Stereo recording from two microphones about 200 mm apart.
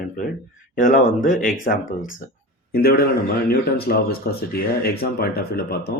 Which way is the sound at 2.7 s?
50° left (ahead or behind).